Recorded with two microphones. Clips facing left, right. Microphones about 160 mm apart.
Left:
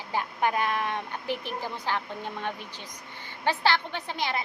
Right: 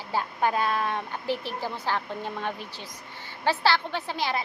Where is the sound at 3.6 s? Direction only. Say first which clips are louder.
Right 1 dB; 20° left (ahead or behind).